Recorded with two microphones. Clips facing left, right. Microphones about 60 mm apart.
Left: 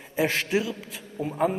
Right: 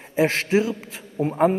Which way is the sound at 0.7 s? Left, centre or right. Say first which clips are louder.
Right 6 dB; right.